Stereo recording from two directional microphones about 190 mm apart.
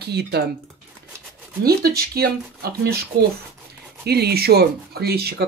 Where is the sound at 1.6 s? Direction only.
50° right (ahead or behind).